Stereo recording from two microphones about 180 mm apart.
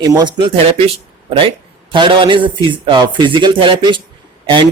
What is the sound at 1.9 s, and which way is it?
Speech, 25° right (ahead or behind).